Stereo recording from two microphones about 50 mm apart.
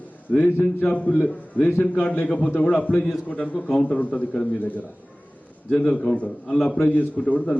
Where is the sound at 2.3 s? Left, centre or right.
Left.